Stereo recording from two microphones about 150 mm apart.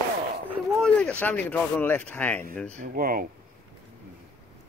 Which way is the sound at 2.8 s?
70° right (ahead or behind).